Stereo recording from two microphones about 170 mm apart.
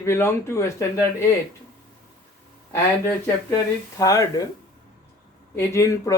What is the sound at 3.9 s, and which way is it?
Speech, 20° left (ahead or behind).